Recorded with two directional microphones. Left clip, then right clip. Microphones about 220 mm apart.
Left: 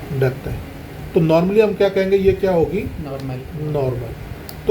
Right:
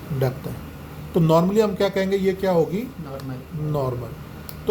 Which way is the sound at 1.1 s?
30° right (ahead or behind).